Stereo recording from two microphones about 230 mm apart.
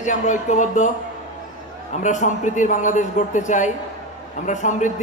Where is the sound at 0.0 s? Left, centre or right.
Left.